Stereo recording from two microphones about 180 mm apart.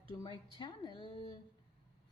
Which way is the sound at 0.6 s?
25° left (ahead or behind).